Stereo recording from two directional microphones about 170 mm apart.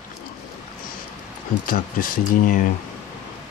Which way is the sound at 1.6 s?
55° left (ahead or behind).